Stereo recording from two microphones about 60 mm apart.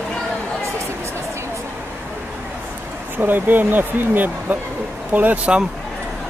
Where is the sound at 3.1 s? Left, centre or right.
Right.